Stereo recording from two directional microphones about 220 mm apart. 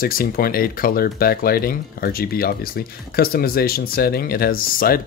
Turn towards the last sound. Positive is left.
turn(degrees=40)  # may be behind; listen again after turning